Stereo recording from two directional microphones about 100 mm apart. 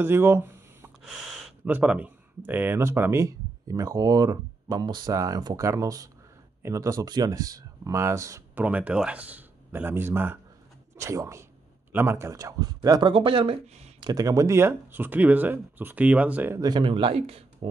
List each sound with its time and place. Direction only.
0.0 s a sound: 25° right (ahead or behind)
1.6 s speech: 15° right (ahead or behind); by 8.4 s 30° right (ahead or behind)
8.5 s speech: 15° right (ahead or behind); by 13.1 s 40° right (ahead or behind)
13.1 s speech: 60° right (ahead or behind)
13.9 s speech: 40° right (ahead or behind); by 16.5 s 15° right (ahead or behind)
16.5 s speech: 40° right (ahead or behind)
16.8 s speech: 60° right (ahead or behind); by 17.6 s 75° right (ahead or behind)